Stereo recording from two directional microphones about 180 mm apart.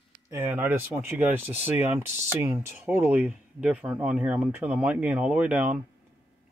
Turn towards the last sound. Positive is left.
turn(degrees=-10)  # may be behind; listen again after turning